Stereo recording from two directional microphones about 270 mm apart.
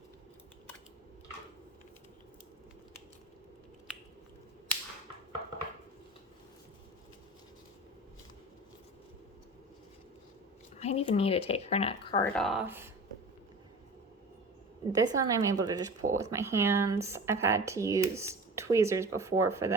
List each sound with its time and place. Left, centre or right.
10.8 s speech: left
12.2 s speech: centre
14.9 s speech: centre